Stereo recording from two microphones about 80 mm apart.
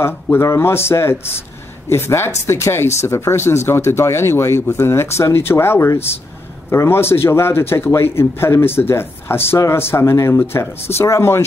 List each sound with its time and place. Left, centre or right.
0.0 s a man's voice: left